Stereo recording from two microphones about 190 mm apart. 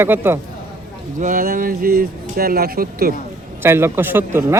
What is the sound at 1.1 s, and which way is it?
Speech, 45° right (ahead or behind).